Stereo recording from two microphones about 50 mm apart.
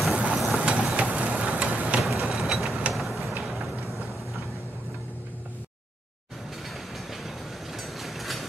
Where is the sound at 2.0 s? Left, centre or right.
Centre.